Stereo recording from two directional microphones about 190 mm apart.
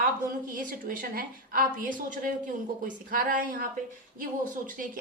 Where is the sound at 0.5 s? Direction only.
50° right (ahead or behind).